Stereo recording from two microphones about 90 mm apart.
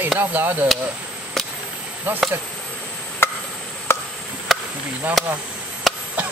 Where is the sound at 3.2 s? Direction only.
25° left (ahead or behind).